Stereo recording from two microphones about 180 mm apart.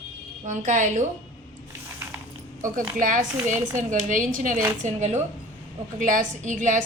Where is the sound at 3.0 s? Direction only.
45° right (ahead or behind).